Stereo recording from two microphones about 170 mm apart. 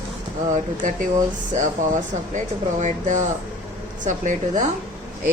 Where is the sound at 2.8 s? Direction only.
45° right (ahead or behind).